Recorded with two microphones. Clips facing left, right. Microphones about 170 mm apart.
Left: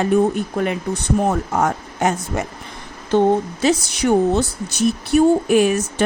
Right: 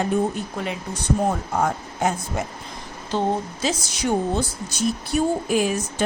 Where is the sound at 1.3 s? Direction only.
75° left (ahead or behind).